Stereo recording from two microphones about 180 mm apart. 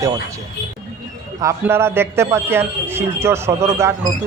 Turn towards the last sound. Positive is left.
turn(degrees=-15)  # may be behind; listen again after turning